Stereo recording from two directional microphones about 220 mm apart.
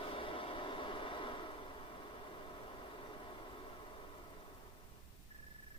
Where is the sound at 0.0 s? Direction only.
25° left (ahead or behind).